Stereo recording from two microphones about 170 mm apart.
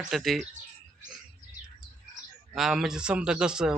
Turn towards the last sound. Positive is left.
turn(degrees=-5)  # may be behind; listen again after turning